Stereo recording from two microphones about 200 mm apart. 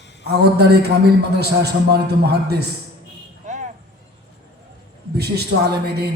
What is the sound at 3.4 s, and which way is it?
Vehicle, 40° right (ahead or behind).